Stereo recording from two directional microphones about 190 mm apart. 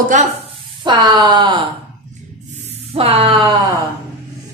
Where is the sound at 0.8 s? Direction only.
25° right (ahead or behind).